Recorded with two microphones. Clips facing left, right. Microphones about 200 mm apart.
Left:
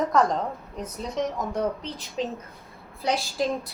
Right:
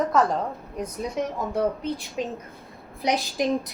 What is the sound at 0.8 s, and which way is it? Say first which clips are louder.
A woman's voice: right 1 dB; 10° right (ahead or behind).